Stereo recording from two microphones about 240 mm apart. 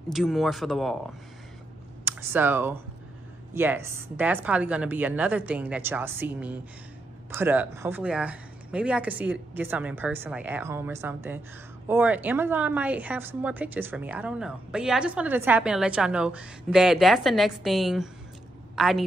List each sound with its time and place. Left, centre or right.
0.1 s a woman's voice: centre